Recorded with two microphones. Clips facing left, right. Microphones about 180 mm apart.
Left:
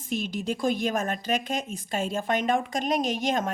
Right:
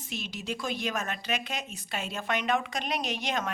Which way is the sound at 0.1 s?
50° left (ahead or behind).